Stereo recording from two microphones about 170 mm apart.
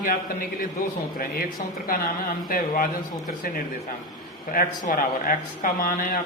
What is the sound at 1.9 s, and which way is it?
A man's voice, 60° left (ahead or behind).